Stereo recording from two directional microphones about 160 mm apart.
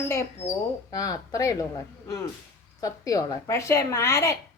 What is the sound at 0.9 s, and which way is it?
Speech, 20° left (ahead or behind).